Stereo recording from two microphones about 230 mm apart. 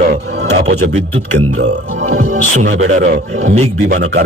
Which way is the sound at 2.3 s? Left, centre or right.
Right.